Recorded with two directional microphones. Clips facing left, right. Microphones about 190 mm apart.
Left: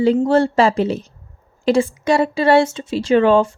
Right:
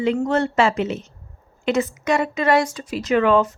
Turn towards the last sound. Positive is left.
turn(degrees=30)  # may be behind; listen again after turning